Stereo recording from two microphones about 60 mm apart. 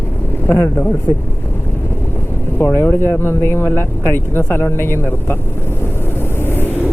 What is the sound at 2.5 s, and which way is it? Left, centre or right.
Speech, left.